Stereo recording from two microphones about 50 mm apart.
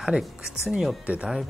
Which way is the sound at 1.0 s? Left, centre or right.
Right.